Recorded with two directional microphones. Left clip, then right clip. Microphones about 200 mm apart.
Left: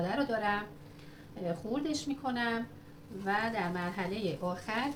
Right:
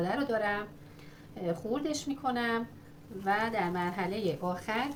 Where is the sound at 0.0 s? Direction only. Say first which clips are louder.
Right 1 dB; 40° right (ahead or behind).